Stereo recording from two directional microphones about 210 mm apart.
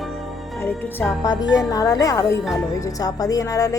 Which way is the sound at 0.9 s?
5° left (ahead or behind).